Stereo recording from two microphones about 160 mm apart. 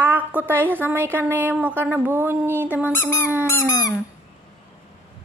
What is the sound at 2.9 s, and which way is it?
Dog, 15° left (ahead or behind).